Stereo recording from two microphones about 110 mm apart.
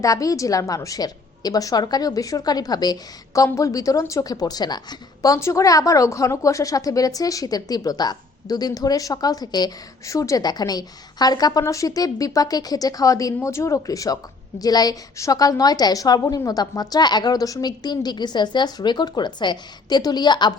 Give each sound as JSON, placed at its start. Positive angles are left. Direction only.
{"t": 0.0, "sound": "a woman's voice", "side_deg": 30}